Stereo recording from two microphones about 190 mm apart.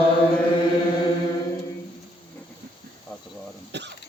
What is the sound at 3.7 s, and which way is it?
Cough, 65° right (ahead or behind).